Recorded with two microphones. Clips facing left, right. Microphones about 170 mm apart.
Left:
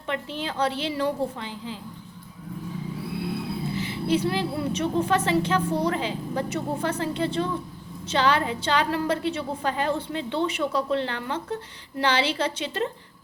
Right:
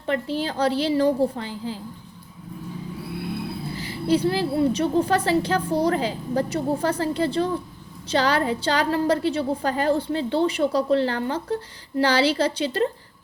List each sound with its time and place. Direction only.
0.1 s a woman's voice: 35° right (ahead or behind)
3.8 s a woman's voice: 35° right (ahead or behind)